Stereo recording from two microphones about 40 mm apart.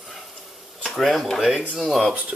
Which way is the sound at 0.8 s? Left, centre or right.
Centre.